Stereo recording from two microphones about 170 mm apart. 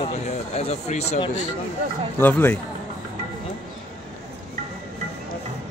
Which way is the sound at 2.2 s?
10° left (ahead or behind).